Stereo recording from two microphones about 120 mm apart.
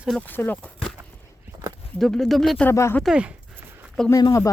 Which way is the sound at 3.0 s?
10° right (ahead or behind).